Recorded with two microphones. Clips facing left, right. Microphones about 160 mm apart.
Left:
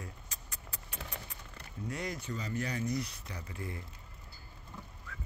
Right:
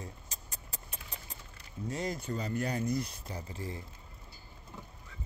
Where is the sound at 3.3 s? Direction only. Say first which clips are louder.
Right 2 dB; 30° right (ahead or behind).